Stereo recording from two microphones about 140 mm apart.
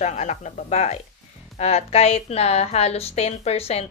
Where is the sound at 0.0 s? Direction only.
55° left (ahead or behind).